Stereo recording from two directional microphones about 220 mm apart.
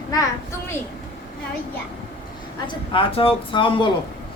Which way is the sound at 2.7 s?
25° left (ahead or behind).